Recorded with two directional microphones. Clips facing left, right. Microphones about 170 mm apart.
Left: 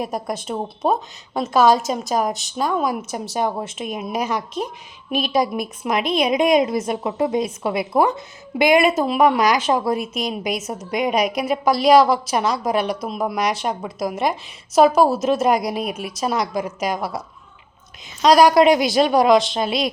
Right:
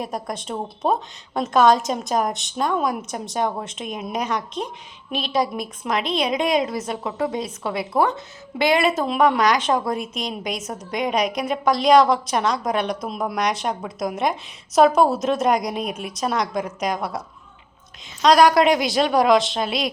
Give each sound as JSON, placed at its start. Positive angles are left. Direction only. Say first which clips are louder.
{"t": 0.0, "sound": "a woman's voice", "louder": "left 3 dB", "side_deg": 10}